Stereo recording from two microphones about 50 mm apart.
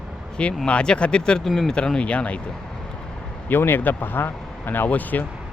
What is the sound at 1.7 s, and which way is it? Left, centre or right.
Speech, centre.